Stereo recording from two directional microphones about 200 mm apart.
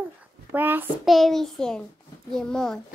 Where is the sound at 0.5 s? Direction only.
10° right (ahead or behind).